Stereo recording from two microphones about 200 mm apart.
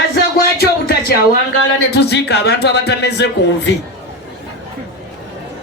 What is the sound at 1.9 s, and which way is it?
Speech, 55° left (ahead or behind).